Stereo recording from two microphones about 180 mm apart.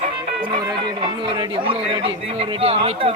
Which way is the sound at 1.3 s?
30° right (ahead or behind).